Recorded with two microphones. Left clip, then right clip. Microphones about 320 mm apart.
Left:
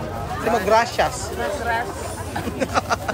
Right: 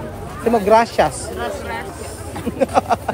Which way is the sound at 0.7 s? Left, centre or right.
Centre.